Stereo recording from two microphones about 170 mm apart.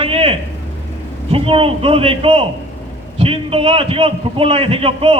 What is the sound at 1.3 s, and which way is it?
A man's voice, 35° right (ahead or behind).